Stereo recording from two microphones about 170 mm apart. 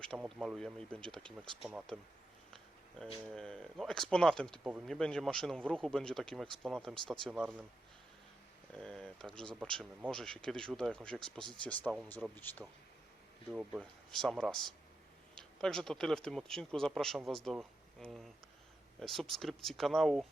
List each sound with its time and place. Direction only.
0.0 s speech: 5° left (ahead or behind)
8.8 s speech: 5° left (ahead or behind)
13.5 s speech: 5° right (ahead or behind)